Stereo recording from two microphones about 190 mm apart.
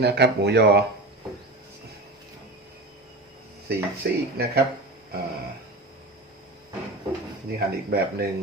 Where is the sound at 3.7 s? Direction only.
55° right (ahead or behind).